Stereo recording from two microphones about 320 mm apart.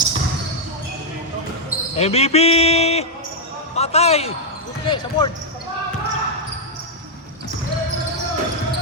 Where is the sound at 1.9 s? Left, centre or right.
Centre.